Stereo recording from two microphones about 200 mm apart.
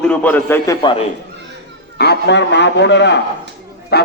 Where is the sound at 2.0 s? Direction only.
55° left (ahead or behind).